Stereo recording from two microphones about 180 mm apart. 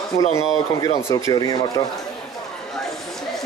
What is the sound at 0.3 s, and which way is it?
Speech, 20° left (ahead or behind).